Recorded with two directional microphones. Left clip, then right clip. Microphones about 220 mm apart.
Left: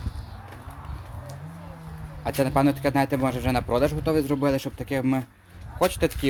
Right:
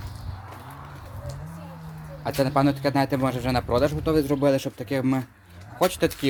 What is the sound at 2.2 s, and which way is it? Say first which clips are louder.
A man's voice: even; 5° left (ahead or behind).